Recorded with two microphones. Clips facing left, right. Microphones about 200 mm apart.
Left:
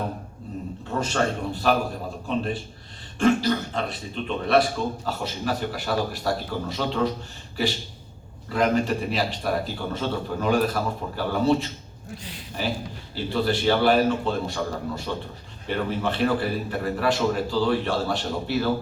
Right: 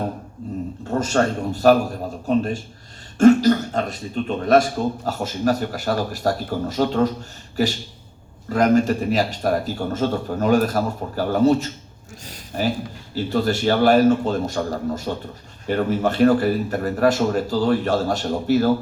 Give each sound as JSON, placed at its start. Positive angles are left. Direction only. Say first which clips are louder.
{"t": 0.9, "sound": "a man's voice", "louder": "right 5 dB", "side_deg": -45}
{"t": 8.4, "sound": "speech", "louder": "right 5 dB", "side_deg": -45}